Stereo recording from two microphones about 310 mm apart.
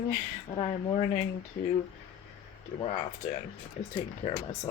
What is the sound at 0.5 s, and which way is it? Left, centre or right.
Speech, left.